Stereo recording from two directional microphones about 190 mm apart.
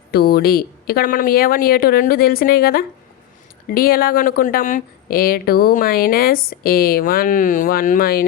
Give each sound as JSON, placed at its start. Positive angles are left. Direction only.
{"t": 0.1, "sound": "speech", "side_deg": 50}